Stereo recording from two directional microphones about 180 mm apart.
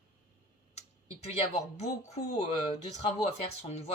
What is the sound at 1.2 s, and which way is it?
Speech, 35° left (ahead or behind).